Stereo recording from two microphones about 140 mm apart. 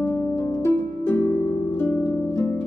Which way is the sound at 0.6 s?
20° left (ahead or behind).